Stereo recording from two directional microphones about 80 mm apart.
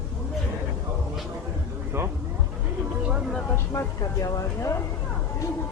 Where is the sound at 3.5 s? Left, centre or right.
Left.